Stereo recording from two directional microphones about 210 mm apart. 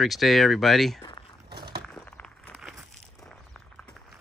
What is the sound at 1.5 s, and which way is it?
Walk, 50° right (ahead or behind).